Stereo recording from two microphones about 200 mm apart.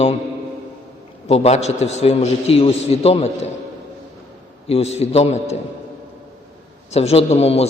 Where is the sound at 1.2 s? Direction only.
30° left (ahead or behind).